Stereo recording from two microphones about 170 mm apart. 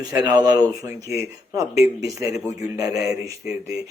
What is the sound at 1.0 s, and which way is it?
Speech, 20° right (ahead or behind).